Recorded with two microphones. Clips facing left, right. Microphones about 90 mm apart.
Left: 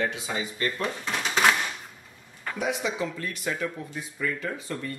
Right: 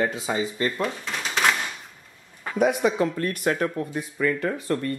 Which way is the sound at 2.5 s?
50° right (ahead or behind).